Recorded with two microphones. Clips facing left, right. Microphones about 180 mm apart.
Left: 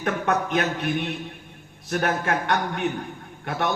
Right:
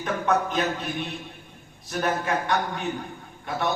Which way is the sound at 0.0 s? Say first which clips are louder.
Even; 65° left (ahead or behind).